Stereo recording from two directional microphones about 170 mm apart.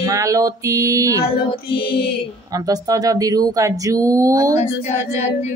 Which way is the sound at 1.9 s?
70° left (ahead or behind).